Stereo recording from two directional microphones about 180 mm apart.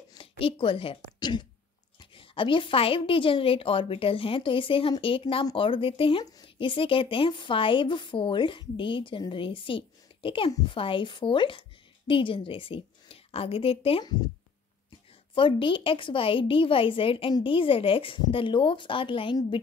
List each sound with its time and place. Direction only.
0.1 s a woman's voice: 30° left (ahead or behind)
15.3 s a woman's voice: 30° left (ahead or behind)